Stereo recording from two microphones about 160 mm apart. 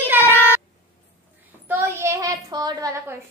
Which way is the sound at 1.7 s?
15° right (ahead or behind).